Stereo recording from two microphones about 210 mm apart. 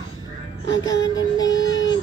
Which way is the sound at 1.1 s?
20° left (ahead or behind).